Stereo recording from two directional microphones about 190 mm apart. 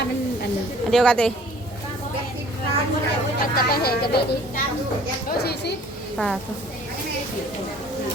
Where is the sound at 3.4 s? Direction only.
50° left (ahead or behind).